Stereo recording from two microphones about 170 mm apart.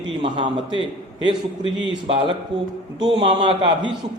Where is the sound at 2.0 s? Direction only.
30° right (ahead or behind).